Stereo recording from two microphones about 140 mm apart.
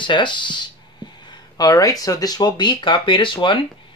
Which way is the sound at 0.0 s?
35° left (ahead or behind).